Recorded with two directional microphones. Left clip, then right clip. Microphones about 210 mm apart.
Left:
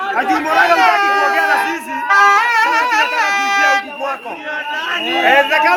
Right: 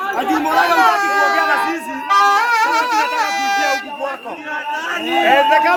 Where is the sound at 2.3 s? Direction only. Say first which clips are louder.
Left 2 dB; 40° right (ahead or behind).